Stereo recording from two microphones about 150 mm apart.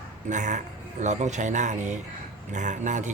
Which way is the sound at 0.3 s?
55° right (ahead or behind).